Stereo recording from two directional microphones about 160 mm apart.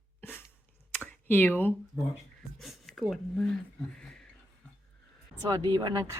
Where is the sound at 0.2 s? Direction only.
10° left (ahead or behind).